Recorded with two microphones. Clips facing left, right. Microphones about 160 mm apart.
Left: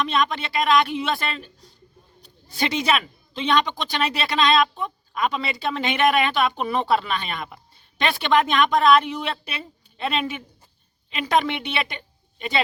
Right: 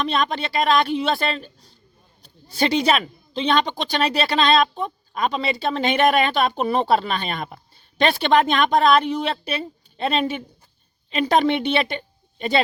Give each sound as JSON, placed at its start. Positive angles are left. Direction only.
{"t": 0.0, "sound": "a woman's voice", "side_deg": -35}